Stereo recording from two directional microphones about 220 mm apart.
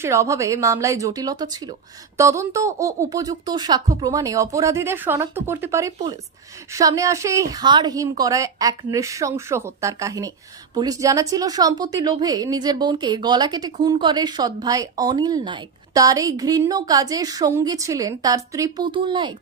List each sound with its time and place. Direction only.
0.0 s a woman's voice: 15° right (ahead or behind)